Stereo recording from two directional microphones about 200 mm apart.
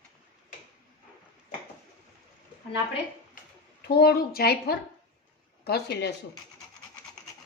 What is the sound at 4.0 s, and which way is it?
Speech, 50° left (ahead or behind).